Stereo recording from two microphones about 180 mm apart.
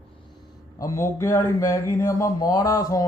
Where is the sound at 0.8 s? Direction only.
15° left (ahead or behind).